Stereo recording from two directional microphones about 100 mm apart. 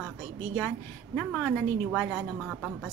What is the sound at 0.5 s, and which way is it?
A woman's voice, 5° left (ahead or behind).